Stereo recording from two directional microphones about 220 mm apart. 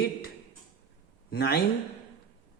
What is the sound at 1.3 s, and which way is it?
Speech, 50° left (ahead or behind).